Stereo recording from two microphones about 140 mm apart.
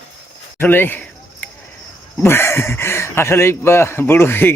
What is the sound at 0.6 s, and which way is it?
Speech, 15° left (ahead or behind).